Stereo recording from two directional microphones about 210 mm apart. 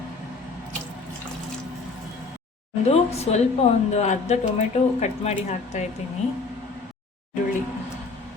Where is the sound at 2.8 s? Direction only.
30° left (ahead or behind).